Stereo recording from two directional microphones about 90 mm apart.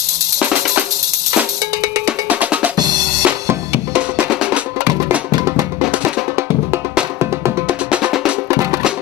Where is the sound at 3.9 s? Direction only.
10° right (ahead or behind).